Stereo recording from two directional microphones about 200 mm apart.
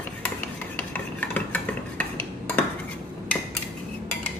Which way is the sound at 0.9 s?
10° left (ahead or behind).